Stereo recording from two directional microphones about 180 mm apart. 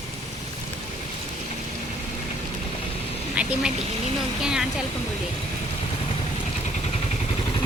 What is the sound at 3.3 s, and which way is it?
A woman's voice, 5° right (ahead or behind).